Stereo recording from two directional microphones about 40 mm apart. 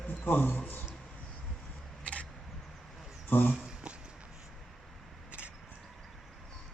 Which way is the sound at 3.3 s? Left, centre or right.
Left.